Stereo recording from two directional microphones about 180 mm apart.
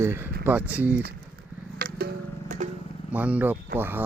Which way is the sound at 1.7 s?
60° right (ahead or behind).